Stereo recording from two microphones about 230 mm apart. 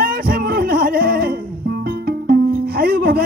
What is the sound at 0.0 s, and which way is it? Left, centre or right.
Music, right.